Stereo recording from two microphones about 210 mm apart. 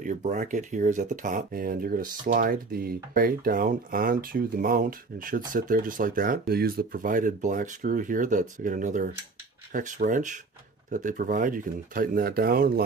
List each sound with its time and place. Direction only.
0.0 s speech: 35° right (ahead or behind)